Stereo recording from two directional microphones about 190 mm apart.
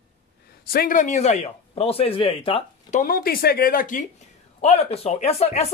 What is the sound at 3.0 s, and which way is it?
Speech, 50° left (ahead or behind).